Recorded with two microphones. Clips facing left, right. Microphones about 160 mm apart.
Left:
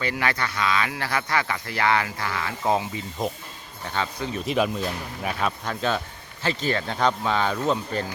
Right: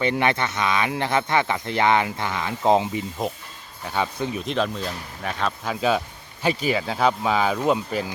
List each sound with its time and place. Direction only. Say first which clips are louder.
0.0 s speech: right 5 dB; 25° right (ahead or behind)
3.2 s speech: right 1 dB; 5° right (ahead or behind)
4.4 s speech: left 4 dB; 10° left (ahead or behind)
5.6 s speech: right 4 dB; 5° right (ahead or behind)